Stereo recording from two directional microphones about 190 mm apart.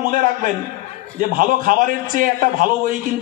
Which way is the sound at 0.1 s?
45° right (ahead or behind).